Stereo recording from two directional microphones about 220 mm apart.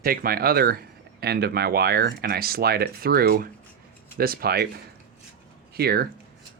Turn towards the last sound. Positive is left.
turn(degrees=-45)  # may be behind; listen again after turning